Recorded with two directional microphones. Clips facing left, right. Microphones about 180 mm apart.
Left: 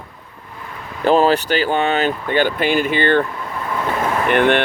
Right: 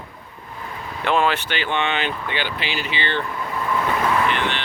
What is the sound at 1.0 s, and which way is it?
Speech, 40° left (ahead or behind).